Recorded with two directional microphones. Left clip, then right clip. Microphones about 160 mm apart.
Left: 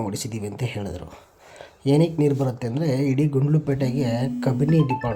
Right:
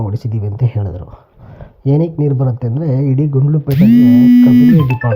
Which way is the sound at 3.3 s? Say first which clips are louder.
Right 5 dB; 10° left (ahead or behind).